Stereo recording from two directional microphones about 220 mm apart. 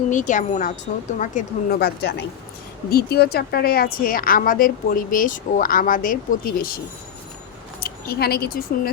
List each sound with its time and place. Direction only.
0.1 s a woman's voice: 35° left (ahead or behind)
7.8 s speech: 45° left (ahead or behind)